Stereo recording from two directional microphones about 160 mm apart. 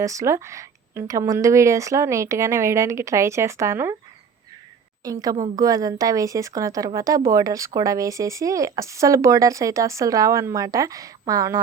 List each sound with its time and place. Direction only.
0.0 s speech: 20° right (ahead or behind)
5.0 s speech: 25° right (ahead or behind)